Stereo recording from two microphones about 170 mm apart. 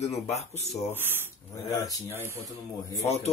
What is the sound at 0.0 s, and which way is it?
Speech, 40° left (ahead or behind).